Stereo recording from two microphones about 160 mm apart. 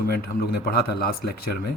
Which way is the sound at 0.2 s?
75° left (ahead or behind).